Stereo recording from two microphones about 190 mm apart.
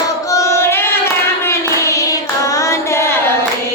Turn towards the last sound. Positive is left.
turn(degrees=15)  # may be behind; listen again after turning